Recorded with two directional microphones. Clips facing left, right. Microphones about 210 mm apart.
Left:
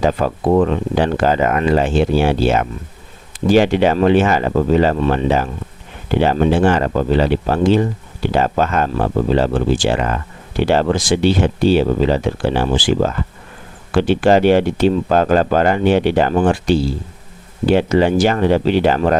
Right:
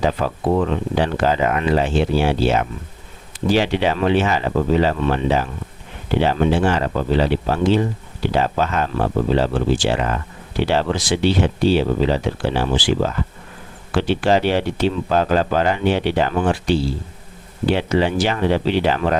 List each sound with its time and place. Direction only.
0.0 s speech: 45° left (ahead or behind)